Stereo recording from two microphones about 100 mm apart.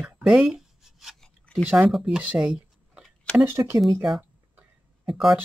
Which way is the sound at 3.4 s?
30° right (ahead or behind).